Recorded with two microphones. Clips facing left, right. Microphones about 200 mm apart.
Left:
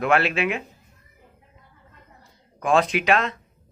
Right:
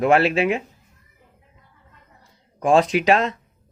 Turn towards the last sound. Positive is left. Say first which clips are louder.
# right 3 dB
turn(degrees=-35)  # may be behind; listen again after turning